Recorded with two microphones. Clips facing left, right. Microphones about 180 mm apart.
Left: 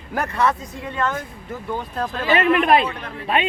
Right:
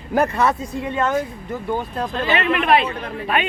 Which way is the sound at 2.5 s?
45° left (ahead or behind).